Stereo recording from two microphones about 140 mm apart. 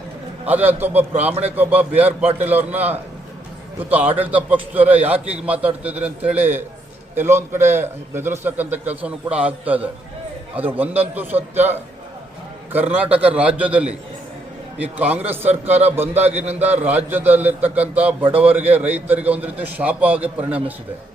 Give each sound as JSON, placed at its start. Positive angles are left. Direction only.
{"t": 0.4, "sound": "a man's voice", "side_deg": -10}
{"t": 14.9, "sound": "a man's voice", "side_deg": -10}
{"t": 16.2, "sound": "a man's voice", "side_deg": -50}
{"t": 16.5, "sound": "a man's voice", "side_deg": -10}